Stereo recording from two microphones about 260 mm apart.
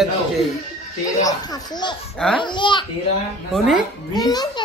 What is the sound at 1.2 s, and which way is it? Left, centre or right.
A child's voice, centre.